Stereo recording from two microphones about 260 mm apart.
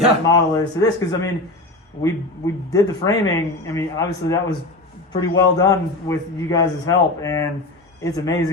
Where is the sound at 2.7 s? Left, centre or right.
Centre.